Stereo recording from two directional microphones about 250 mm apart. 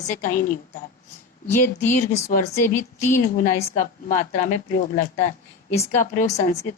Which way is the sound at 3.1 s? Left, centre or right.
Left.